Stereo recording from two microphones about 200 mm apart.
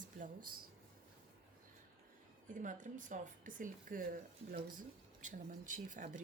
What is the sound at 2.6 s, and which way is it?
Speech, 40° right (ahead or behind).